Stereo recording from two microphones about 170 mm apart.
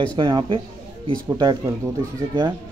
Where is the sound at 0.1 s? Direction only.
25° right (ahead or behind).